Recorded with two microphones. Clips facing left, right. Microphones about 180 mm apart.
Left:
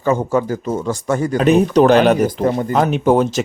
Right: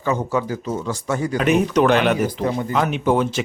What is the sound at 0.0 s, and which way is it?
Speech, 45° left (ahead or behind).